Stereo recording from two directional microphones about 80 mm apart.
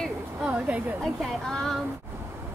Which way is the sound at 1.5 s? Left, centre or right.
Centre.